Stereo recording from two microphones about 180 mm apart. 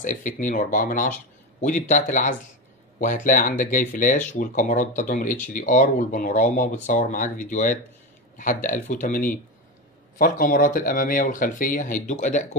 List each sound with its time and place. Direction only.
0.0 s speech: 45° left (ahead or behind)